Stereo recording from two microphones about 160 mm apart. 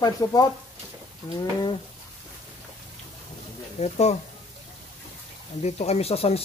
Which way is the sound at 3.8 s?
45° left (ahead or behind).